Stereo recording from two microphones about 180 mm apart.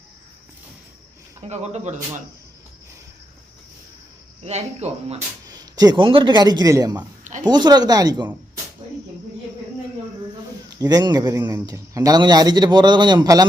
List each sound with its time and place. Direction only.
1.4 s speech: 40° right (ahead or behind)
4.4 s speech: 35° right (ahead or behind)
5.5 s a man's voice: 20° right (ahead or behind)
10.7 s a man's voice: 20° right (ahead or behind)